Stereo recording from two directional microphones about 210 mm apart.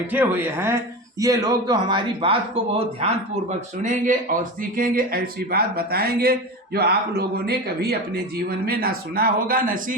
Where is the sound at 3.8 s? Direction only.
40° right (ahead or behind).